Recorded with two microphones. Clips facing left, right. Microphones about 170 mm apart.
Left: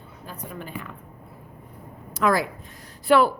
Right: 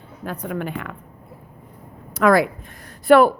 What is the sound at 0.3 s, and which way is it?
Speech, 70° right (ahead or behind).